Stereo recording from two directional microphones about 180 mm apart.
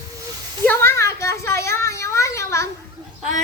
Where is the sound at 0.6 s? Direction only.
15° left (ahead or behind).